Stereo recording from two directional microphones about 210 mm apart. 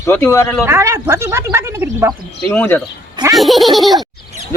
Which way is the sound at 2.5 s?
10° left (ahead or behind).